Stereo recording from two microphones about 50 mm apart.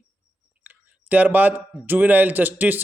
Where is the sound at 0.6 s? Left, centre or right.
Right.